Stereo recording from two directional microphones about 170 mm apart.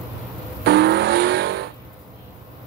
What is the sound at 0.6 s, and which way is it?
Vehicle, 75° right (ahead or behind).